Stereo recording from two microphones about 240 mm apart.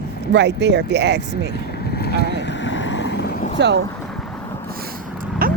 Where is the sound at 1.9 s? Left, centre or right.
Left.